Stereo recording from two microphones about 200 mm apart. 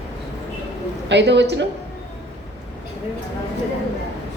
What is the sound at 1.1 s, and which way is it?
Speech, 60° right (ahead or behind).